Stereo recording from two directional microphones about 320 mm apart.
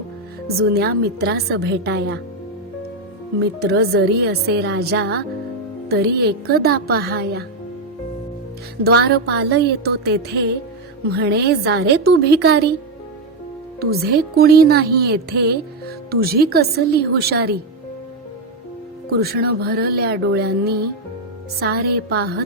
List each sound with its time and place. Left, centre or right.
0.5 s a woman's voice: right
3.4 s a woman's voice: right
8.8 s a woman's voice: right
13.9 s speech: right
19.1 s speech: right